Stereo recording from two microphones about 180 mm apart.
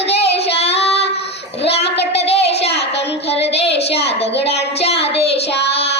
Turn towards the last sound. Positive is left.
turn(degrees=70)  # may be behind; listen again after turning